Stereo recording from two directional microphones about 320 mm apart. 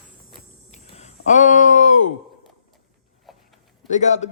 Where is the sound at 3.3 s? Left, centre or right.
Centre.